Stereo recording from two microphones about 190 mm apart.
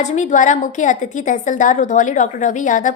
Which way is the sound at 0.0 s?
40° left (ahead or behind).